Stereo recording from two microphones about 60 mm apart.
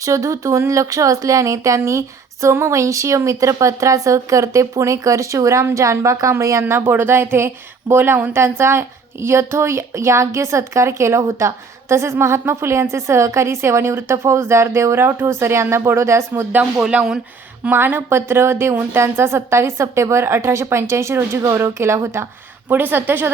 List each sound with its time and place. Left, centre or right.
0.0 s a woman's voice: right
16.5 s a woman's voice: right
22.7 s a woman's voice: right